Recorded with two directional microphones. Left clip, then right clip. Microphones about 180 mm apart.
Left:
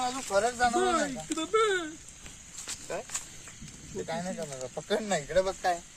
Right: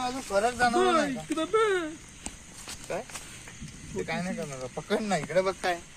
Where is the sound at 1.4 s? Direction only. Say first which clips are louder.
Right 1 dB; 25° right (ahead or behind).